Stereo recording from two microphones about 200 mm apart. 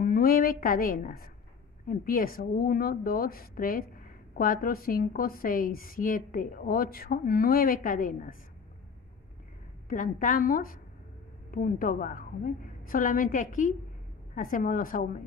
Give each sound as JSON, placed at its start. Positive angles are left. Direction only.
{"t": 0.0, "sound": "a woman's voice", "side_deg": 45}
{"t": 9.8, "sound": "a woman's voice", "side_deg": 40}